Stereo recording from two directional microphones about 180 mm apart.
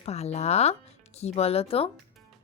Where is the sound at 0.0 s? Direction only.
35° left (ahead or behind).